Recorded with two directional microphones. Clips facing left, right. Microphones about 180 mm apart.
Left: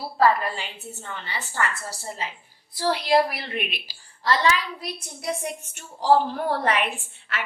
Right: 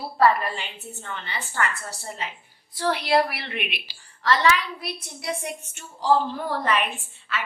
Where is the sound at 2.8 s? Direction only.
35° left (ahead or behind).